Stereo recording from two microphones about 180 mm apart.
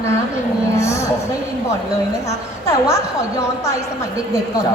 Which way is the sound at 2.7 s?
15° left (ahead or behind).